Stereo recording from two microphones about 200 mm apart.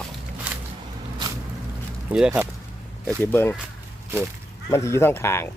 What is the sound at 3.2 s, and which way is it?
Speech, 10° left (ahead or behind).